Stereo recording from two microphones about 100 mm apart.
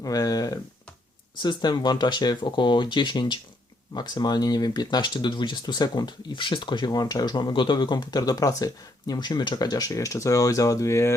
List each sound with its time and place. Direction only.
0.0 s speech: 35° left (ahead or behind)
1.4 s speech: 45° left (ahead or behind); by 11.1 s 30° left (ahead or behind)